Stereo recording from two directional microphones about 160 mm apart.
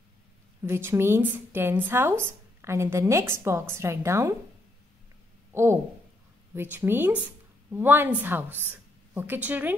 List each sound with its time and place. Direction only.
0.7 s speech: 15° right (ahead or behind)
5.5 s speech: 15° right (ahead or behind)